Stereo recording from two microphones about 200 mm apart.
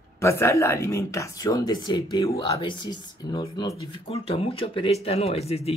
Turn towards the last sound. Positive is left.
turn(degrees=30)  # may be behind; listen again after turning